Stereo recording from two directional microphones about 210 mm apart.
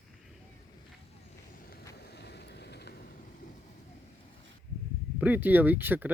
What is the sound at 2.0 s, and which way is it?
Vehicle, 50° left (ahead or behind).